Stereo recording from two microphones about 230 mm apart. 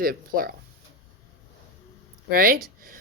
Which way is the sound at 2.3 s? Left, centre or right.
Right.